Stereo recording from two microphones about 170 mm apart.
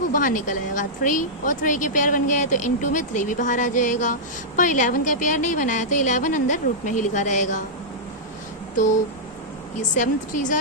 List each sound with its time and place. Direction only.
0.1 s speech: 50° left (ahead or behind)
9.9 s speech: 45° left (ahead or behind)